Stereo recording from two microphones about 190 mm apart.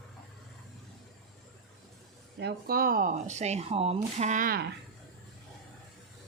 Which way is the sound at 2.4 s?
50° right (ahead or behind).